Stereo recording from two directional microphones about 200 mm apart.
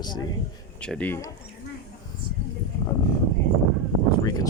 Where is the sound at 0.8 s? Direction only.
5° left (ahead or behind).